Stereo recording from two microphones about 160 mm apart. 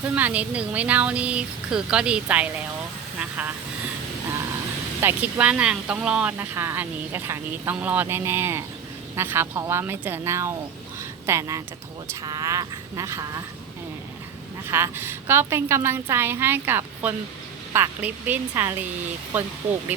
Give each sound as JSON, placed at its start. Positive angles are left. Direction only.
{"t": 0.0, "sound": "speech", "side_deg": -10}
{"t": 3.2, "sound": "vehicle", "side_deg": -10}
{"t": 4.9, "sound": "speech", "side_deg": -10}
{"t": 14.7, "sound": "speech", "side_deg": -15}